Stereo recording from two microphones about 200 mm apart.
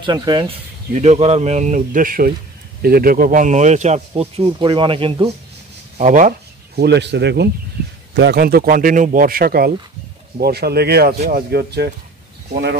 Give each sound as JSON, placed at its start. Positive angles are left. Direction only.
{"t": 0.0, "sound": "speech", "side_deg": -20}
{"t": 0.9, "sound": "speech", "side_deg": -35}
{"t": 5.9, "sound": "a man's voice", "side_deg": -40}